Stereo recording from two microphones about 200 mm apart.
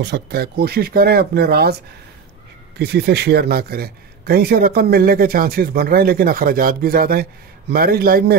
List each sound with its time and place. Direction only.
0.0 s speech: 55° right (ahead or behind)
2.8 s speech: 55° right (ahead or behind)